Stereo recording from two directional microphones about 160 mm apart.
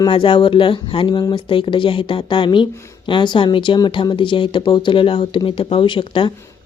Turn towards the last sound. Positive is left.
turn(degrees=30)  # may be behind; listen again after turning